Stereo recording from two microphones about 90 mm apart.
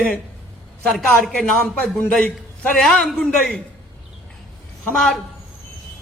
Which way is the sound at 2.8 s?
5° left (ahead or behind).